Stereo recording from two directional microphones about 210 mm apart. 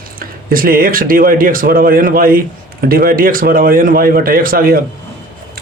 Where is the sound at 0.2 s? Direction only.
45° right (ahead or behind).